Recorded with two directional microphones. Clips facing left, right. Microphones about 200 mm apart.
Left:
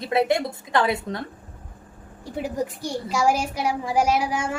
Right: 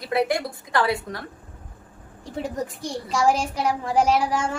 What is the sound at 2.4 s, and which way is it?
A child's voice, 5° left (ahead or behind).